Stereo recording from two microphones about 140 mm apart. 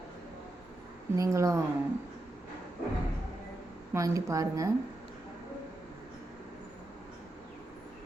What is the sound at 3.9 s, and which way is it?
Speech, 25° right (ahead or behind).